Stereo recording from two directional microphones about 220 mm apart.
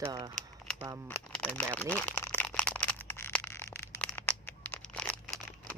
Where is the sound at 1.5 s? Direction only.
5° left (ahead or behind).